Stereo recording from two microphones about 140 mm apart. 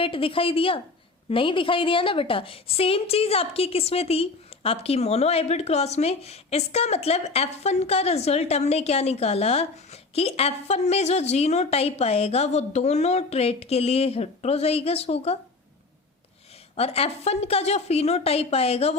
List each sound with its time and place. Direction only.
0.0 s a woman's voice: 40° left (ahead or behind)
16.7 s a woman's voice: 45° left (ahead or behind)